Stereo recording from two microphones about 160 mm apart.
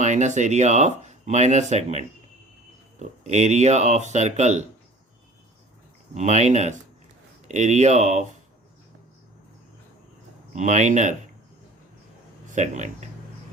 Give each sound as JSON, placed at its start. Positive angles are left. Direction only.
{"t": 0.0, "sound": "speech", "side_deg": -50}
{"t": 6.1, "sound": "speech", "side_deg": -45}
{"t": 10.5, "sound": "speech", "side_deg": -45}
{"t": 12.5, "sound": "speech", "side_deg": -50}